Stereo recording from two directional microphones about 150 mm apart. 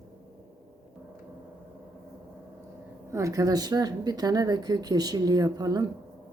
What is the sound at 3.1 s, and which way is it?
Speech, 20° right (ahead or behind).